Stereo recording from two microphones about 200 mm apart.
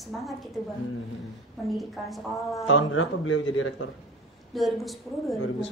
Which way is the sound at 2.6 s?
80° left.